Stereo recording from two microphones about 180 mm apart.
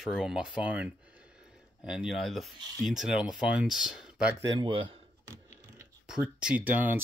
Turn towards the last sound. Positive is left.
turn(degrees=-10)  # may be behind; listen again after turning